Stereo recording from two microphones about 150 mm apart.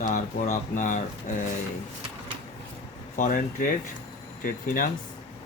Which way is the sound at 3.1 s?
65° left (ahead or behind).